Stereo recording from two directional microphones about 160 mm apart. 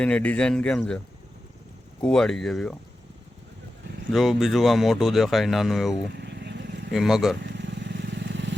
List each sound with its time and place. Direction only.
0.0 s a man's voice: 10° left (ahead or behind)
4.1 s speech: centre (ahead or behind)
6.1 s vehicle: 90° right
6.9 s speech: centre (ahead or behind)
7.4 s vehicle: 90° right